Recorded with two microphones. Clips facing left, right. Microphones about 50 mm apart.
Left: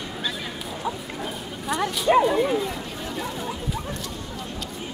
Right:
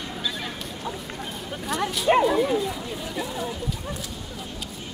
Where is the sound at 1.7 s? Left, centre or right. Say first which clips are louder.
Left 1 dB; centre.